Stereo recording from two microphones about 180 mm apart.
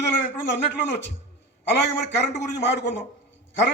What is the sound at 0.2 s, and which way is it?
A man's voice, 75° left (ahead or behind).